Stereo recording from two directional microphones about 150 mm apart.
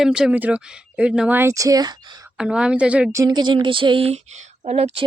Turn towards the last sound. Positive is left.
turn(degrees=-45)  # may be behind; listen again after turning